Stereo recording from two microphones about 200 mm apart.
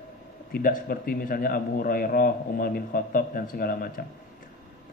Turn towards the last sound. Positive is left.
turn(degrees=45)  # may be behind; listen again after turning